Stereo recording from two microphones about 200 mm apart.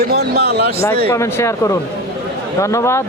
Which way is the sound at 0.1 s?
50° right (ahead or behind).